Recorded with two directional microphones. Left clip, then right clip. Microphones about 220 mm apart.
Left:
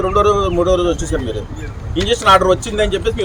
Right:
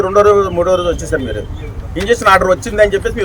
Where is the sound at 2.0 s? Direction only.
5° right (ahead or behind).